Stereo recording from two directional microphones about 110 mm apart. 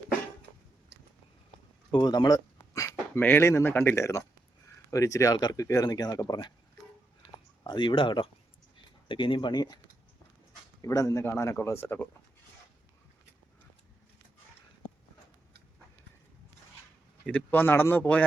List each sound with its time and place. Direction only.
1.9 s a sound: 40° left (ahead or behind)
3.2 s speech: 20° left (ahead or behind); by 6.5 s 35° left (ahead or behind)
7.6 s speech: 45° left (ahead or behind)
10.8 s speech: 30° left (ahead or behind)
17.2 s speech: 15° left (ahead or behind)